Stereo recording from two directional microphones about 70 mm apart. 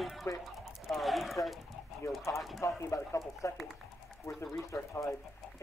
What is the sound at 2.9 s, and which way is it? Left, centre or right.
Speech, left.